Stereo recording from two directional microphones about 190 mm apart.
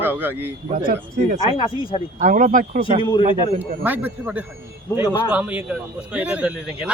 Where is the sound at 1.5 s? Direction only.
25° left (ahead or behind).